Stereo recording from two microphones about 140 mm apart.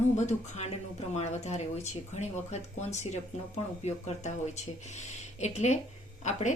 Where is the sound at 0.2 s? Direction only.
55° left (ahead or behind).